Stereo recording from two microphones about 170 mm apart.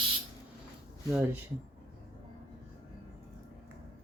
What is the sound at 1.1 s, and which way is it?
Speech, 10° right (ahead or behind).